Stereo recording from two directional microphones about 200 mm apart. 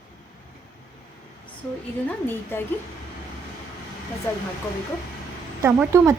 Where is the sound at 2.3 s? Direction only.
10° left (ahead or behind).